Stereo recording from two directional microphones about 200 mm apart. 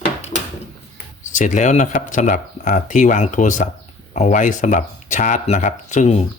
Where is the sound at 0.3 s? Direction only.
40° left (ahead or behind).